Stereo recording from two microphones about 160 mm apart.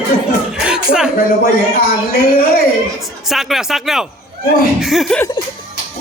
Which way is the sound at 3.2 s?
Centre (ahead or behind).